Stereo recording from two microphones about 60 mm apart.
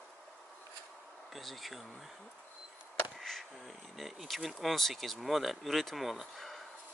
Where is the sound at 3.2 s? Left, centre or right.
Centre.